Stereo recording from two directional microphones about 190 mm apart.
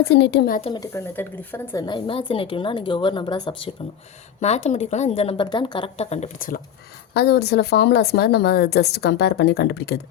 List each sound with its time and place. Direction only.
0.2 s speech: 65° left (ahead or behind)
0.6 s speech: 20° left (ahead or behind)
1.9 s a woman's voice: 25° left (ahead or behind)
4.4 s speech: 35° left (ahead or behind)
7.1 s speech: 60° left (ahead or behind)